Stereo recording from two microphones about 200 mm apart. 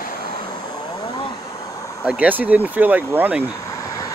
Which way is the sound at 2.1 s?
10° right (ahead or behind).